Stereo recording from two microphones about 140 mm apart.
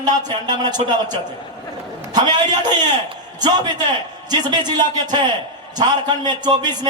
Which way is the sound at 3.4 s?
30° right (ahead or behind).